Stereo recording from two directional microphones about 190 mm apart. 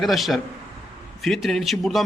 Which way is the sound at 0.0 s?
Centre (ahead or behind).